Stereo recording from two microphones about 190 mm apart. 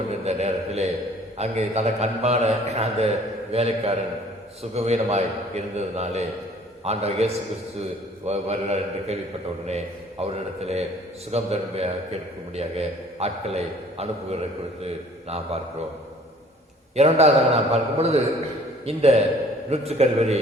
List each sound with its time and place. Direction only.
0.3 s a man's voice: 35° right (ahead or behind)
16.9 s a man's voice: 35° right (ahead or behind)